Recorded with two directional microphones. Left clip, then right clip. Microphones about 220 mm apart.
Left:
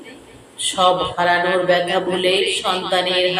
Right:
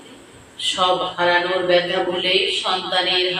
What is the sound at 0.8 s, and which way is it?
A man's voice, 50° left (ahead or behind).